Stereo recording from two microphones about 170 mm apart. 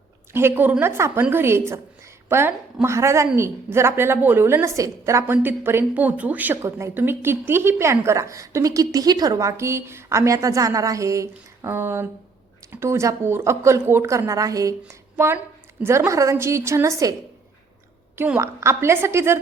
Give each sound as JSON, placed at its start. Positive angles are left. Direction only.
{"t": 0.3, "sound": "a woman's voice", "side_deg": -15}
{"t": 18.2, "sound": "a woman's voice", "side_deg": -15}